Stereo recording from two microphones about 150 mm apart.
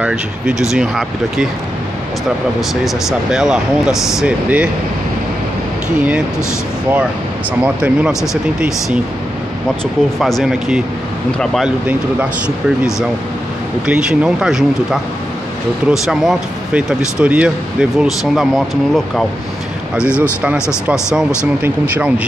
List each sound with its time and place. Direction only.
0.0 s speech: 5° right (ahead or behind)
2.7 s speech: centre (ahead or behind)
5.9 s speech: 10° right (ahead or behind)
7.6 s speech: 5° right (ahead or behind)
10.1 s speech: centre (ahead or behind)
20.0 s speech: 5° right (ahead or behind)